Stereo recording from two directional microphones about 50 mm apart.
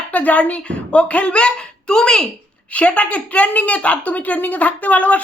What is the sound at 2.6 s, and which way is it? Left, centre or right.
A woman's voice, left.